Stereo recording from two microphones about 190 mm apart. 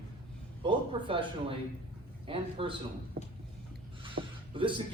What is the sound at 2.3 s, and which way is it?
Speech, 25° right (ahead or behind).